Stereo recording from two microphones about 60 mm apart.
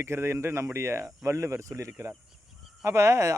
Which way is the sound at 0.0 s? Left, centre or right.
Right.